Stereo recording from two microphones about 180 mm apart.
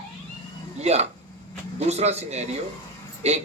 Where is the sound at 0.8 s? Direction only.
35° right (ahead or behind).